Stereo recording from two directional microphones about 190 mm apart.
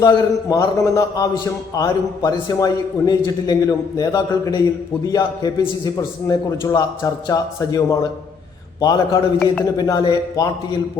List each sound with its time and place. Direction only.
0.0 s a man's voice: 15° left (ahead or behind)